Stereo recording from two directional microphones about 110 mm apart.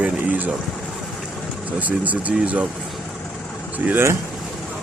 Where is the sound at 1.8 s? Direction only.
15° right (ahead or behind).